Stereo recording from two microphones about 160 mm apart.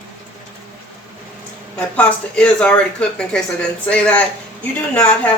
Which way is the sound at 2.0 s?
5° left (ahead or behind).